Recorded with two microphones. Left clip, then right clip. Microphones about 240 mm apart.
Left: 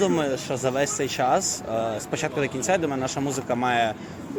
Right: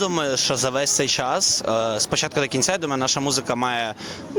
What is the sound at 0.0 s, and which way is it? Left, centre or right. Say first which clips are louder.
Speech: right 2 dB; right.